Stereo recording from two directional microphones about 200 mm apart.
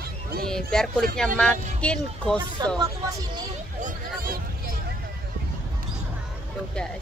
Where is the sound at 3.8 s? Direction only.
45° right (ahead or behind).